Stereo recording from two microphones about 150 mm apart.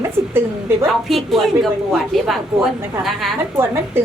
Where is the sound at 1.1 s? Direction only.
Centre (ahead or behind).